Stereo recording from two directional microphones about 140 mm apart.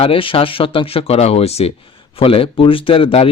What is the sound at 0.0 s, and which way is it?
Speech, 40° left (ahead or behind).